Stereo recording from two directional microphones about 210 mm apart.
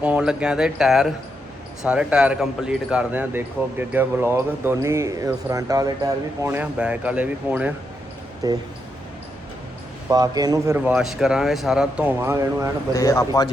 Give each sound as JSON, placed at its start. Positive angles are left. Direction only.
{"t": 0.0, "sound": "speech", "side_deg": -5}
{"t": 8.4, "sound": "speech", "side_deg": -15}
{"t": 10.1, "sound": "speech", "side_deg": -20}
{"t": 12.9, "sound": "speech", "side_deg": 15}